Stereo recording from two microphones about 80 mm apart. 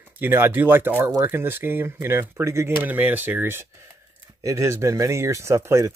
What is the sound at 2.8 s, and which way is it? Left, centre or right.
Speech, right.